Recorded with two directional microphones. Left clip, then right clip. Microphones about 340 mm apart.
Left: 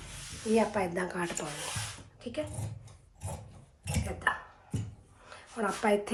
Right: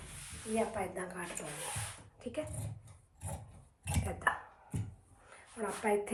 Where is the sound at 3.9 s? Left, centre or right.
Centre.